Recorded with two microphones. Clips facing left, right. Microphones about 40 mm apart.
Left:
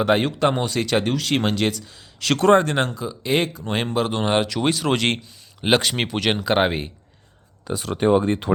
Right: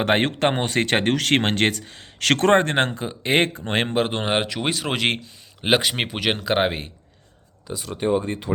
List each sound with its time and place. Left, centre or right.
0.0 s speech: right
4.7 s speech: centre
7.7 s speech: left